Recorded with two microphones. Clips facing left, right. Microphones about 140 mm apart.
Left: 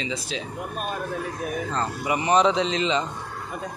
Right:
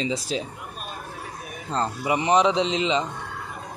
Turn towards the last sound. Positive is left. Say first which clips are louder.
# right 1 dB
turn(degrees=-20)  # may be behind; listen again after turning